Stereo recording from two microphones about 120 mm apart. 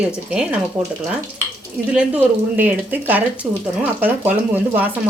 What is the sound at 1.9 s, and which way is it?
Speech, 10° right (ahead or behind).